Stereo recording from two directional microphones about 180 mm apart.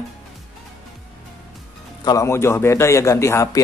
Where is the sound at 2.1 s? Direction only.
15° left (ahead or behind).